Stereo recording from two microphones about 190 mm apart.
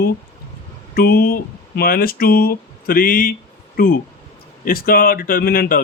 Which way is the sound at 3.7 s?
50° left (ahead or behind).